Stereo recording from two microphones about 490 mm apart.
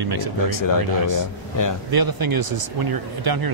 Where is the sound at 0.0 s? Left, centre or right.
Right.